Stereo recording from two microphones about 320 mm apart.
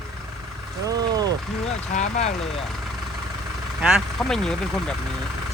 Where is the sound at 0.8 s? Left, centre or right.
Centre.